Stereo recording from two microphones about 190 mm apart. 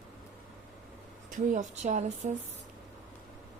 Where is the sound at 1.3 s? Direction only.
40° right (ahead or behind).